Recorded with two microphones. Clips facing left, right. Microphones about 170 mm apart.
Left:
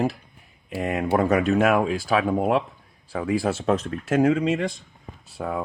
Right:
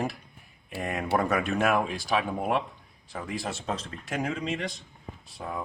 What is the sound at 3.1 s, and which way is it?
Speech, 60° left (ahead or behind).